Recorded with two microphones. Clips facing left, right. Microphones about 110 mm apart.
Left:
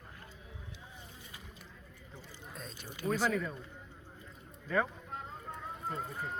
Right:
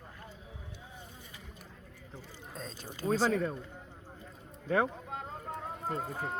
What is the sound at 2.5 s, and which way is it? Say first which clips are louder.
Speech: right 4 dB; 35° right (ahead or behind).